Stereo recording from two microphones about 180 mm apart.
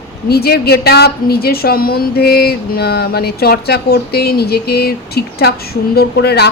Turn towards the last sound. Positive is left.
turn(degrees=65)  # may be behind; listen again after turning